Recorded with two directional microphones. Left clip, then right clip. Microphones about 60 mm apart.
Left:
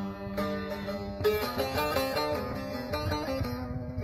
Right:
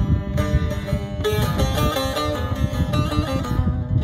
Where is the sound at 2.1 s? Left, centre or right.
Left.